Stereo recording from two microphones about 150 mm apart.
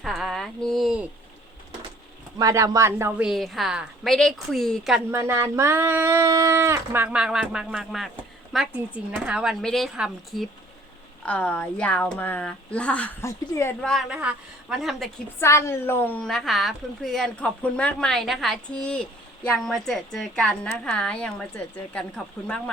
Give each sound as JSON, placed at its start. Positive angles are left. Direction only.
{"t": 0.0, "sound": "a sound", "side_deg": 0}
{"t": 2.4, "sound": "a woman's voice", "side_deg": -20}
{"t": 5.1, "sound": "a woman's voice", "side_deg": -15}
{"t": 11.3, "sound": "a woman's voice", "side_deg": 10}
{"t": 13.8, "sound": "a woman's voice", "side_deg": 0}
{"t": 15.4, "sound": "a woman's voice", "side_deg": 20}